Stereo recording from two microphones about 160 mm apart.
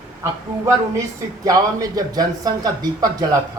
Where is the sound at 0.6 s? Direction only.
20° right (ahead or behind).